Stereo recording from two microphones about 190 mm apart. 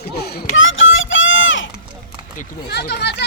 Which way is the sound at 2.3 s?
60° left (ahead or behind).